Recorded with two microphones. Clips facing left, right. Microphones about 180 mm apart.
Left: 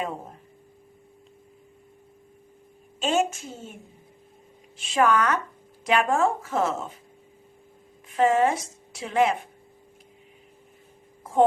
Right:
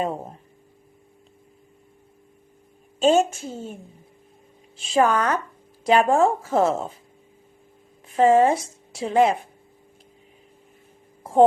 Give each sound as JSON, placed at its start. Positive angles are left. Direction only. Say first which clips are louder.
{"t": 3.0, "sound": "speech", "louder": "right 6 dB", "side_deg": -35}
{"t": 4.8, "sound": "speech", "louder": "right 2 dB", "side_deg": -35}
{"t": 8.1, "sound": "a woman's voice", "louder": "right 4 dB", "side_deg": -35}